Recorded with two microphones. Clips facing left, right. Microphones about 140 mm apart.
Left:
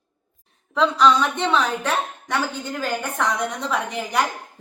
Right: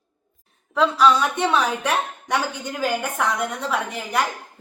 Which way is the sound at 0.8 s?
5° right (ahead or behind).